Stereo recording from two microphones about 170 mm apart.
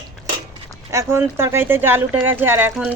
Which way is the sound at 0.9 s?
15° right (ahead or behind).